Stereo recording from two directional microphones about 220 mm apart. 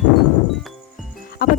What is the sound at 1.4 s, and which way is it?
Speech, 40° left (ahead or behind).